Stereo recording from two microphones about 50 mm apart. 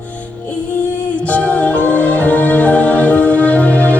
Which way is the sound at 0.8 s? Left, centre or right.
Left.